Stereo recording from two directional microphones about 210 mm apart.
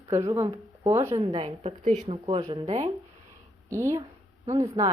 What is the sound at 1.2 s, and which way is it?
Speech, 25° right (ahead or behind).